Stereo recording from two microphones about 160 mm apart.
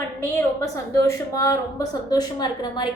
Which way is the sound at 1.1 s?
20° left (ahead or behind).